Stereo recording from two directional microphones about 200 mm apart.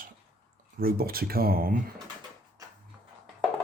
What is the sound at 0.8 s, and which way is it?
Speech, 50° right (ahead or behind).